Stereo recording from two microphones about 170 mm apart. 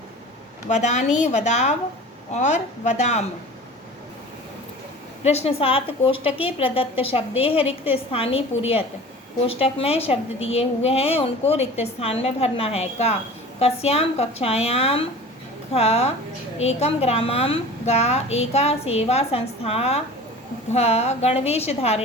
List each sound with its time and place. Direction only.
0.7 s a woman's voice: 45° left (ahead or behind)
5.2 s a woman's voice: 40° left (ahead or behind)